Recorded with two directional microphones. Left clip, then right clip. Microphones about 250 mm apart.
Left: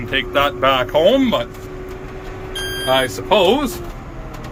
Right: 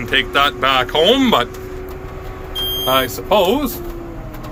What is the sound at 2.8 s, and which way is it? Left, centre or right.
Speech, centre.